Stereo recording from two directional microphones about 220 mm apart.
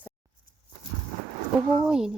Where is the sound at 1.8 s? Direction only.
5° right (ahead or behind).